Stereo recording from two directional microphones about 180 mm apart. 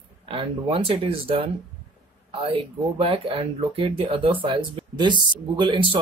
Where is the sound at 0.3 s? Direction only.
30° right (ahead or behind).